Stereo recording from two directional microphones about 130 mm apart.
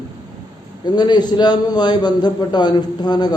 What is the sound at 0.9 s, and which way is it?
A man's voice, 35° left (ahead or behind).